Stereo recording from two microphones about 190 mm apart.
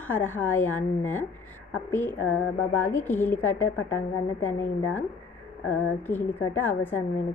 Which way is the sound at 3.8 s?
90° left.